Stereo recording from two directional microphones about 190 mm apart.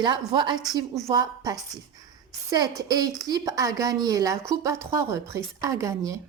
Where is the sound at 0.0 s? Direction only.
25° right (ahead or behind).